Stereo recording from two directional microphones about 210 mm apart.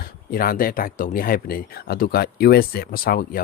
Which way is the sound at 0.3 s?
45° left (ahead or behind).